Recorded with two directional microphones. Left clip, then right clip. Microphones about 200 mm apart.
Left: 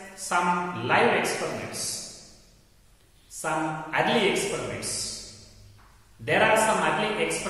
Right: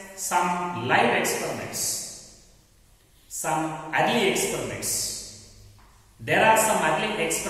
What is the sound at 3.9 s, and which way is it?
A man's voice, 15° left (ahead or behind).